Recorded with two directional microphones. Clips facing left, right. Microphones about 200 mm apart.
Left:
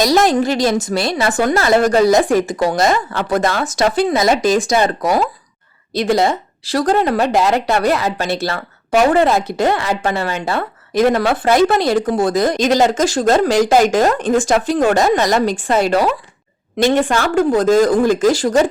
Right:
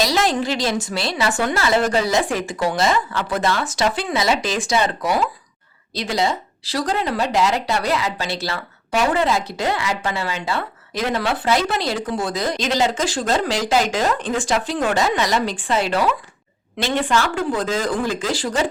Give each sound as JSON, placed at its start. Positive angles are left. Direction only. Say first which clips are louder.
{"t": 0.0, "sound": "speech", "louder": "left 6 dB", "side_deg": 45}